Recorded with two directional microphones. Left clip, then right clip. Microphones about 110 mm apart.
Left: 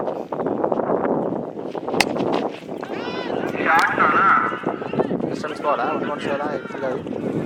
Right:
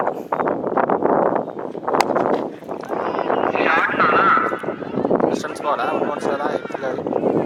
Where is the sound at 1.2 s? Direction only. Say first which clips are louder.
Right 7 dB; 40° right (ahead or behind).